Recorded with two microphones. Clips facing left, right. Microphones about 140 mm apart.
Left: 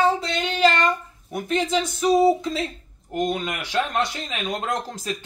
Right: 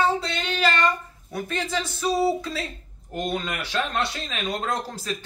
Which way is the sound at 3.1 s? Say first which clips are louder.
Left 3 dB; 20° left (ahead or behind).